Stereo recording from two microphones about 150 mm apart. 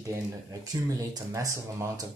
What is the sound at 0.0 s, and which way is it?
Speech, 25° right (ahead or behind).